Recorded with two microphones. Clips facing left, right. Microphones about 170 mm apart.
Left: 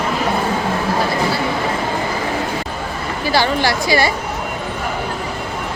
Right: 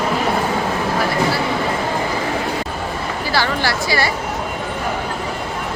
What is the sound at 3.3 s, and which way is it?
Speech, 20° left (ahead or behind).